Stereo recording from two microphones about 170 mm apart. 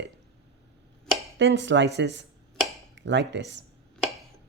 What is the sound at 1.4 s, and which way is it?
Speech, 90° right.